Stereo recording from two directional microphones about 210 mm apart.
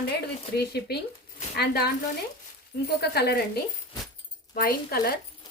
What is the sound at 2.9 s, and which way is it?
Speech, 50° left (ahead or behind).